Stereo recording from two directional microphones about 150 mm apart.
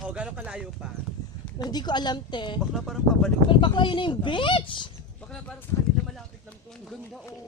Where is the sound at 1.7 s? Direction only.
30° left (ahead or behind).